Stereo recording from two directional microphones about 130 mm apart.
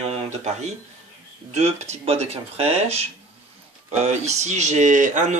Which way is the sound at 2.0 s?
50° right (ahead or behind).